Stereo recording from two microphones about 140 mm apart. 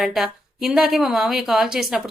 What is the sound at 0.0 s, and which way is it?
Speech, centre (ahead or behind).